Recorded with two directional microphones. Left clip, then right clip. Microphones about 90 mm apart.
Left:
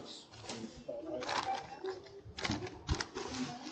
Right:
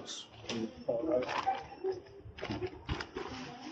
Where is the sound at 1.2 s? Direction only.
30° left (ahead or behind).